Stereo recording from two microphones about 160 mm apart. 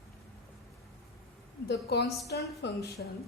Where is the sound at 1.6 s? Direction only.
90° left.